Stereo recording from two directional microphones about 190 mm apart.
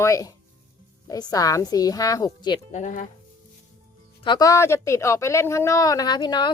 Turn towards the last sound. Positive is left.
turn(degrees=25)  # may be behind; listen again after turning